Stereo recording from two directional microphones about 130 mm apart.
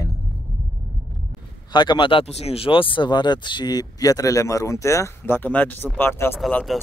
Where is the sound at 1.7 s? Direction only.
35° left (ahead or behind); by 6.3 s 15° left (ahead or behind).